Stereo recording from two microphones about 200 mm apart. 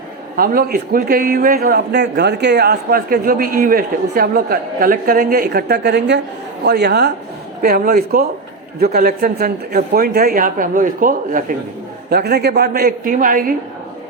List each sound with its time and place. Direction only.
0.3 s a man's voice: 45° right (ahead or behind)
12.1 s a man's voice: 55° right (ahead or behind)